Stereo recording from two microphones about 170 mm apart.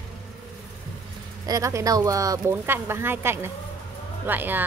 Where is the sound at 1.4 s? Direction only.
20° right (ahead or behind).